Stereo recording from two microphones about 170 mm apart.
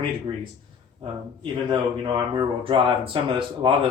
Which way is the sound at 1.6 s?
30° right (ahead or behind).